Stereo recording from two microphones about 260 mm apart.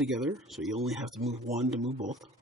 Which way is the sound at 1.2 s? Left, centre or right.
Right.